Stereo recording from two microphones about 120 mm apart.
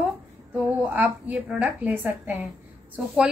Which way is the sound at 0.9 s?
15° right (ahead or behind).